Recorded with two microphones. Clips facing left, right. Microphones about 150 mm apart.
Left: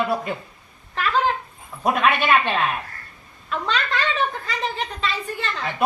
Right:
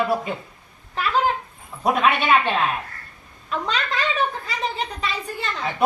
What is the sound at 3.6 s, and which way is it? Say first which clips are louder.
A woman's voice: left 1 dB; 10° right (ahead or behind).